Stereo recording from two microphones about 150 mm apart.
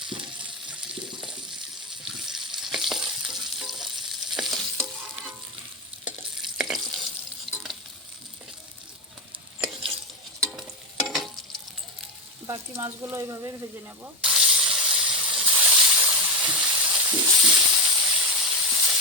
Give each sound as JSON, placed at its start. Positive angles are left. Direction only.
{"t": 2.2, "sound": "frying", "side_deg": 0}
{"t": 6.1, "sound": "stir", "side_deg": -5}
{"t": 10.6, "sound": "stir", "side_deg": 0}
{"t": 12.5, "sound": "speech", "side_deg": -20}
{"t": 14.0, "sound": "a sound", "side_deg": -5}